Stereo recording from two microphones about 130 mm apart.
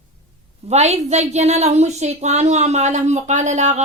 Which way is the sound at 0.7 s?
55° right (ahead or behind).